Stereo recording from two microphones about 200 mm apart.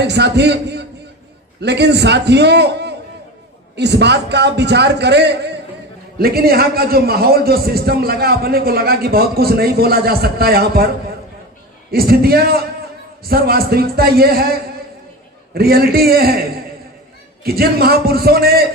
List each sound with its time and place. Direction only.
0.0 s a man's voice: 55° right (ahead or behind)
11.9 s a man's voice: 50° right (ahead or behind)
17.4 s a man's voice: 50° right (ahead or behind)